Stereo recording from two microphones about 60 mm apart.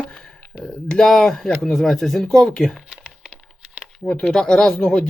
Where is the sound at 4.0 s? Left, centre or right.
Centre.